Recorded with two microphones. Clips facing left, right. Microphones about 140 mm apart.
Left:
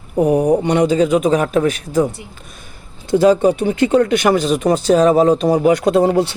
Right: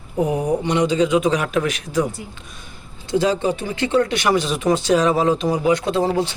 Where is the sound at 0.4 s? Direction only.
55° left (ahead or behind).